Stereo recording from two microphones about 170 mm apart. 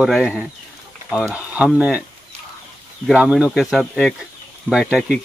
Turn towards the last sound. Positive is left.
turn(degrees=0)  # may be behind; listen again after turning